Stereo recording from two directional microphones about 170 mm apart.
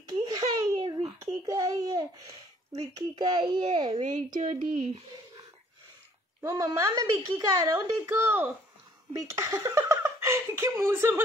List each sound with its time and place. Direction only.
0.0 s babbling: 20° right (ahead or behind)
3.0 s a woman's voice: 25° right (ahead or behind)
4.4 s speech: 45° right (ahead or behind)
6.4 s a woman's voice: 15° right (ahead or behind)